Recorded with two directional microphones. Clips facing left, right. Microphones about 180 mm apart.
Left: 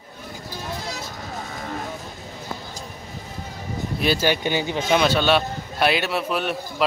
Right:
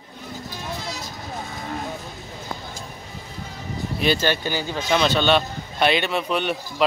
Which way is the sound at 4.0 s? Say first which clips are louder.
Even; 5° left (ahead or behind).